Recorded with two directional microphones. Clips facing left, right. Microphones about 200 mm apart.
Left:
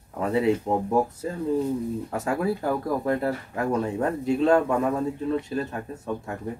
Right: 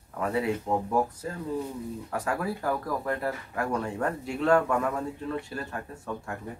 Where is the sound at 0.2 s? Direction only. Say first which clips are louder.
Left 5 dB; 25° left (ahead or behind).